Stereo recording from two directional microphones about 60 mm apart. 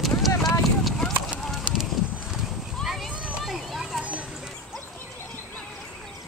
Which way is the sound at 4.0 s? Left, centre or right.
Right.